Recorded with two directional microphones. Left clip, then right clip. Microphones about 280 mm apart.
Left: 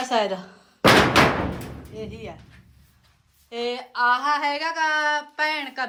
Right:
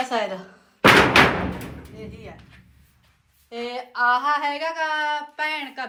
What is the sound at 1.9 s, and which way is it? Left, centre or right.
Speech, centre.